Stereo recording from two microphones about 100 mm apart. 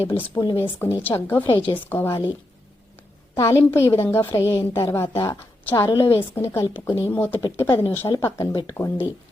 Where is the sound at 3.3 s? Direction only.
30° left (ahead or behind).